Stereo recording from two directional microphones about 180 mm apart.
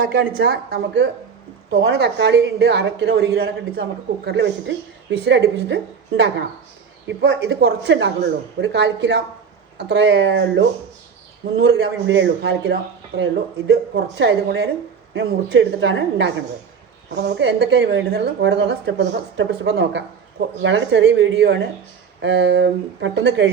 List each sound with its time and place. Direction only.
0.0 s a woman's voice: 60° right (ahead or behind)
5.1 s a woman's voice: 70° right (ahead or behind); by 10.7 s 90° right
11.5 s a woman's voice: 70° right (ahead or behind)
15.1 s a woman's voice: 90° right
17.2 s a woman's voice: 75° right (ahead or behind)
20.6 s speech: 90° right